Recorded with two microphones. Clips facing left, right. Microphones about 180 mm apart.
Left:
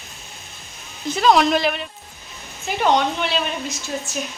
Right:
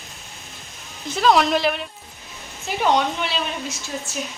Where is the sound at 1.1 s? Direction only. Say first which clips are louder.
Left 1 dB; centre (ahead or behind).